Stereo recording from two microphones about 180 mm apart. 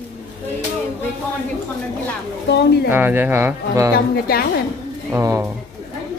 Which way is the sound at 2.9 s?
10° right (ahead or behind).